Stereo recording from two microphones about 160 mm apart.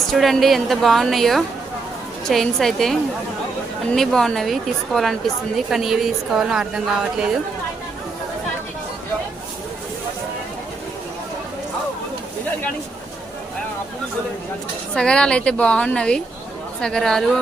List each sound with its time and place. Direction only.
0.1 s a woman's voice: centre (ahead or behind)
14.9 s a woman's voice: 5° left (ahead or behind)